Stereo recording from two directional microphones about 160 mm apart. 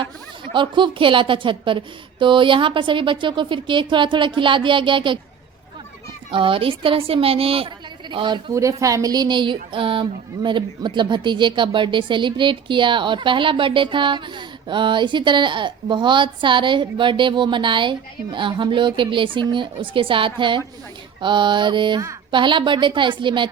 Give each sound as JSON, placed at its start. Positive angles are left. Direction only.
{"t": 0.5, "sound": "speech", "side_deg": -30}
{"t": 6.3, "sound": "speech", "side_deg": -35}
{"t": 8.8, "sound": "speech", "side_deg": -20}
{"t": 21.2, "sound": "mantra", "side_deg": -30}
{"t": 22.3, "sound": "speech", "side_deg": -30}